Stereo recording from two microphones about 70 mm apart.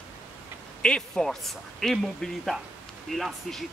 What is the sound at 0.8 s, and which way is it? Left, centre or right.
Speech, centre.